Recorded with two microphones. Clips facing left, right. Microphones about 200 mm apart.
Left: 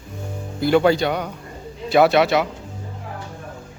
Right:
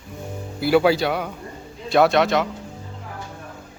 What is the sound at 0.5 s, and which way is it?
Speech, 5° right (ahead or behind).